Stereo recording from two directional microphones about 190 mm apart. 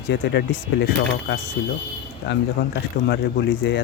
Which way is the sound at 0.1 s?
65° left (ahead or behind).